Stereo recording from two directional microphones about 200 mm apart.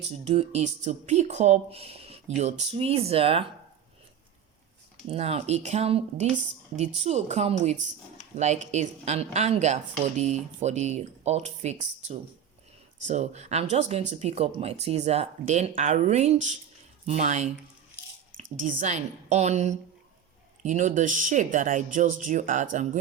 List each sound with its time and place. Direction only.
0.1 s speech: 30° right (ahead or behind)
5.0 s speech: 30° right (ahead or behind)
18.5 s speech: 40° right (ahead or behind)